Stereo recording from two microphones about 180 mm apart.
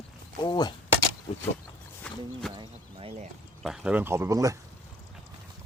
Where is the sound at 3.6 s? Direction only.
5° right (ahead or behind).